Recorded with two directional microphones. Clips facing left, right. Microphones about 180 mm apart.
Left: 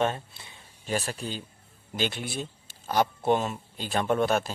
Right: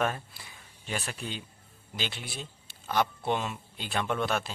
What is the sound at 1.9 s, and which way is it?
Speech, 50° left (ahead or behind).